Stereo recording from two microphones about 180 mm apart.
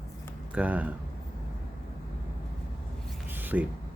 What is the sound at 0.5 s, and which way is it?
Speech, 10° right (ahead or behind).